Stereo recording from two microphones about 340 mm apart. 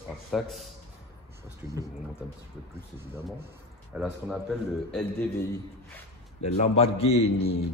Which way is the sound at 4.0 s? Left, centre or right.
Centre.